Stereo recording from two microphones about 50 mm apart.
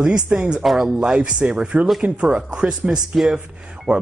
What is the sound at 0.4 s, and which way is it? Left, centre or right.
Speech, right.